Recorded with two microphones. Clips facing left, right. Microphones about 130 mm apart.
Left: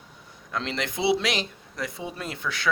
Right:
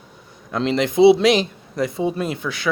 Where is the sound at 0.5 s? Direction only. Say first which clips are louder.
Right 11 dB; 20° right (ahead or behind).